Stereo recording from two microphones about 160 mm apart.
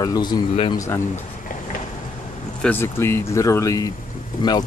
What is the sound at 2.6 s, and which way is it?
Speech, 15° left (ahead or behind).